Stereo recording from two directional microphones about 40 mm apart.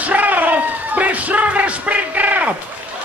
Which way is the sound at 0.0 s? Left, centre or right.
Right.